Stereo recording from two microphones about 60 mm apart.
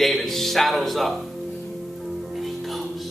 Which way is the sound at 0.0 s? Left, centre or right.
Centre.